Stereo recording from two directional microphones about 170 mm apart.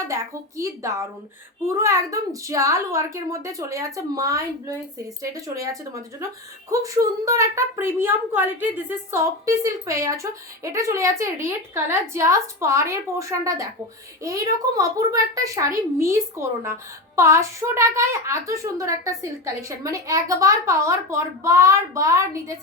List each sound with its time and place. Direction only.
0.1 s a woman's voice: 15° right (ahead or behind)